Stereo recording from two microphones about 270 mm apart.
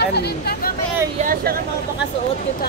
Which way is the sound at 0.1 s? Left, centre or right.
Left.